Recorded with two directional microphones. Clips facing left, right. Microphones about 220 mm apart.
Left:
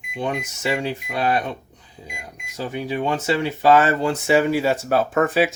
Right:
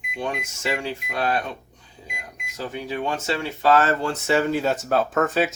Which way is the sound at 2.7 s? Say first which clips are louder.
Left 4 dB; 15° left (ahead or behind).